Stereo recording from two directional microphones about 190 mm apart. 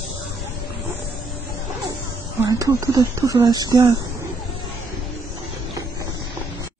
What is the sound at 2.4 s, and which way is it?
Speech, 20° right (ahead or behind).